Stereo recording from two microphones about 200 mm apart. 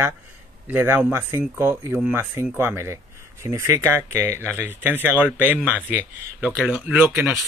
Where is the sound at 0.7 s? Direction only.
10° right (ahead or behind).